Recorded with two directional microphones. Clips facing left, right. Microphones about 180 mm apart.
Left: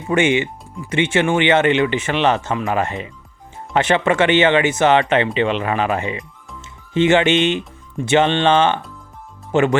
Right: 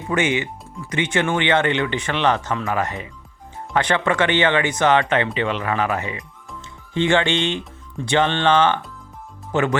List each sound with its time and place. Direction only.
0.1 s speech: 25° left (ahead or behind)